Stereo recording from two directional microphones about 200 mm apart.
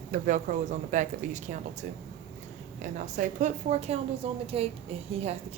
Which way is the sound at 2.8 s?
35° right (ahead or behind).